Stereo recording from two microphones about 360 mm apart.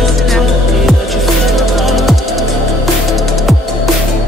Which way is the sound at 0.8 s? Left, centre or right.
Centre.